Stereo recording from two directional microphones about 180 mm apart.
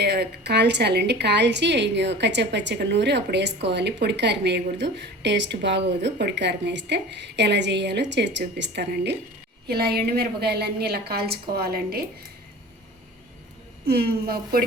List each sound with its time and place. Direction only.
0.0 s a woman's voice: 65° right (ahead or behind)
13.8 s a woman's voice: 60° right (ahead or behind)